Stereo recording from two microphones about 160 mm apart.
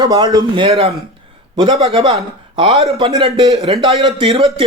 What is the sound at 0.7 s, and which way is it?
Speech, 40° right (ahead or behind).